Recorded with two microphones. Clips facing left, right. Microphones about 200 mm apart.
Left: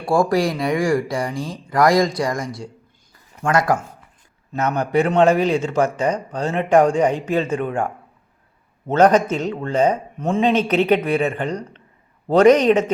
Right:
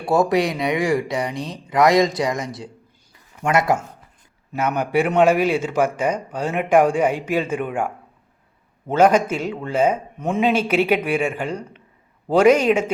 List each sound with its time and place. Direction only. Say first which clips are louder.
0.1 s speech: even; 20° right (ahead or behind)
2.0 s speech: even; centre (ahead or behind)
3.4 s speech: even; 25° right (ahead or behind)
4.5 s a man's voice: left 1 dB; 10° right (ahead or behind)